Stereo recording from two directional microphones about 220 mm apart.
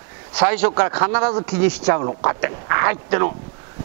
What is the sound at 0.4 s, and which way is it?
Speech, 10° right (ahead or behind).